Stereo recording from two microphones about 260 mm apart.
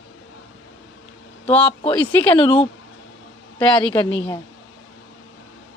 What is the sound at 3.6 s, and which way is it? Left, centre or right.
Speech, centre.